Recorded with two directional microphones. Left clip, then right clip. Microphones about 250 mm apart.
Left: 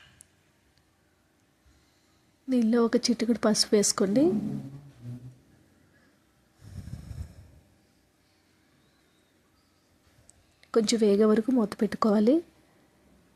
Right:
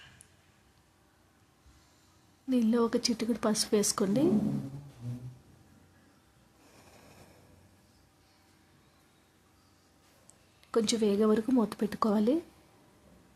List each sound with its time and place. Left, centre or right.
2.5 s a woman's voice: centre
10.6 s a woman's voice: centre